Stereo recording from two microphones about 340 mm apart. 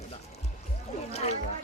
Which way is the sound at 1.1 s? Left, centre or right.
Centre.